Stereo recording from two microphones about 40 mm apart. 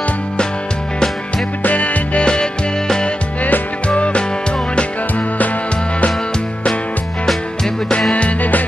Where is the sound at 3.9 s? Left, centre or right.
Left.